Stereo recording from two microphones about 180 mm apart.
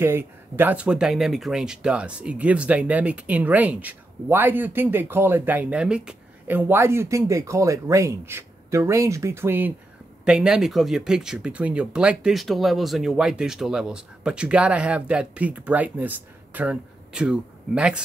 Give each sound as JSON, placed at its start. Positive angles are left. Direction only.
{"t": 0.0, "sound": "speech", "side_deg": -10}